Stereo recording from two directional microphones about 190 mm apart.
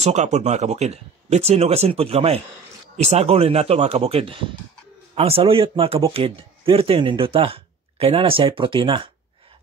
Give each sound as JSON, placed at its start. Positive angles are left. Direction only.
{"t": 0.0, "sound": "speech", "side_deg": -35}